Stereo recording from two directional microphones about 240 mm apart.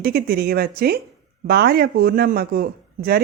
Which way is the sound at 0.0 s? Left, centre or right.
Right.